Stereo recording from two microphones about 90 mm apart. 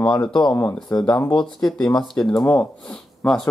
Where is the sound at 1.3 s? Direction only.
5° left (ahead or behind).